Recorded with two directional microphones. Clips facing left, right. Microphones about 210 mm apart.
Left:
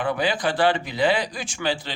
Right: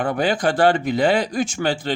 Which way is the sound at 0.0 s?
45° right (ahead or behind).